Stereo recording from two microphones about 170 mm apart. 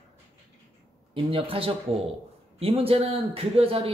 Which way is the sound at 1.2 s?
35° right (ahead or behind).